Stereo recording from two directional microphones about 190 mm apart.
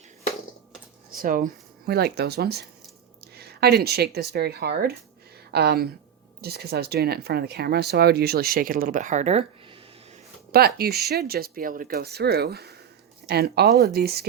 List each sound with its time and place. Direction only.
1.1 s a woman's voice: 50° right (ahead or behind); by 9.7 s 30° right (ahead or behind)
10.5 s speech: 55° right (ahead or behind)